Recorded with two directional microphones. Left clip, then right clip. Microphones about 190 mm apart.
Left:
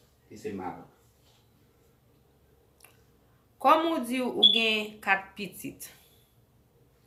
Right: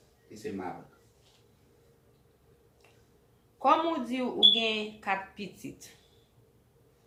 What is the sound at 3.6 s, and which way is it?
Speech, 20° left (ahead or behind).